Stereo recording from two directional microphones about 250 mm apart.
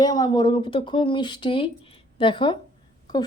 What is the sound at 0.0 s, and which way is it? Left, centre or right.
Speech, centre.